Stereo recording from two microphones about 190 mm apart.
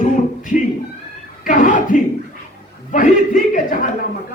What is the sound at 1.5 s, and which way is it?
Chuckle, 45° left (ahead or behind).